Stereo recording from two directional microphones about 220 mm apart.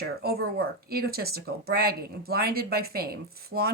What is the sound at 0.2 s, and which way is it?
Speech, 45° right (ahead or behind).